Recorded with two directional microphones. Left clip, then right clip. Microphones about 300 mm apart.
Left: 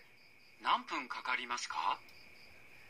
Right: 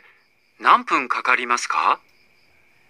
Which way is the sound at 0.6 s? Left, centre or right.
Right.